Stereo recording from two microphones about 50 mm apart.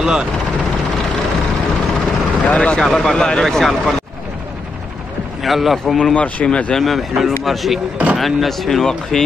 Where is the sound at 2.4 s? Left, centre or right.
Left.